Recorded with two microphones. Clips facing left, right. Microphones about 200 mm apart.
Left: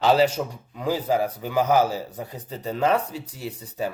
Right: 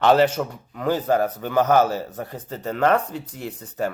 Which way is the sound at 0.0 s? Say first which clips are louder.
Right 2 dB; 10° left (ahead or behind).